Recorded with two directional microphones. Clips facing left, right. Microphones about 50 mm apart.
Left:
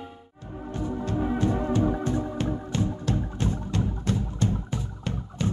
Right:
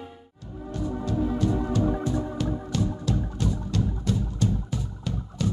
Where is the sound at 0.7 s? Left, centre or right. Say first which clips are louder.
Right 1 dB; left.